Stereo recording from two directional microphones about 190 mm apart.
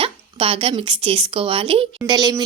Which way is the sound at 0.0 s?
30° right (ahead or behind).